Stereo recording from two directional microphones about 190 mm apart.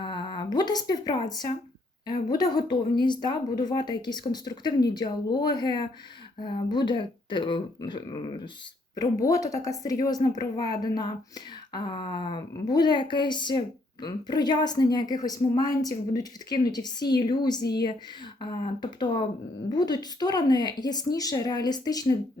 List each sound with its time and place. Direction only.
0.0 s a woman's voice: 25° left (ahead or behind)
17.6 s speech: 60° left (ahead or behind)
18.3 s a woman's voice: 25° left (ahead or behind)